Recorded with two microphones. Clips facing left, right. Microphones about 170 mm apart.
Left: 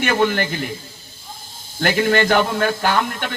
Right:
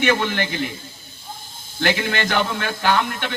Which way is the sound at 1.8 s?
45° left (ahead or behind).